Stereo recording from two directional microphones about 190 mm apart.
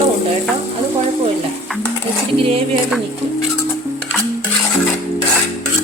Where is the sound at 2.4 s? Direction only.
30° right (ahead or behind).